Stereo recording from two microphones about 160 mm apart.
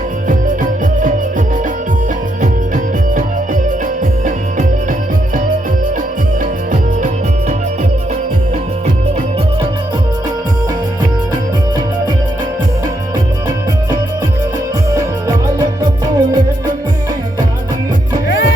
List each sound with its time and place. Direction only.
0.3 s music: 55° right (ahead or behind)
15.5 s music: 25° right (ahead or behind)